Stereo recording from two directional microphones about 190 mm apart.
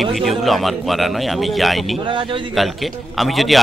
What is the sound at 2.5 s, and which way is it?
Speech, centre (ahead or behind).